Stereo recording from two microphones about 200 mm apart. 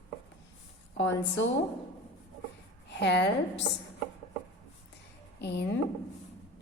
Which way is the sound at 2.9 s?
60° left (ahead or behind).